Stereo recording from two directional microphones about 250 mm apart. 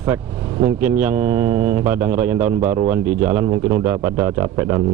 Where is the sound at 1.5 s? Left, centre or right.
Right.